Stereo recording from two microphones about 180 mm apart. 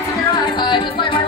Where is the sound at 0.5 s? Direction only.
25° left (ahead or behind).